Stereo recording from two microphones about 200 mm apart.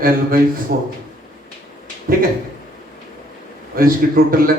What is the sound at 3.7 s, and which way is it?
Speech, 45° right (ahead or behind).